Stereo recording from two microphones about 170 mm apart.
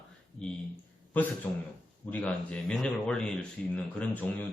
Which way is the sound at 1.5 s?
15° left (ahead or behind).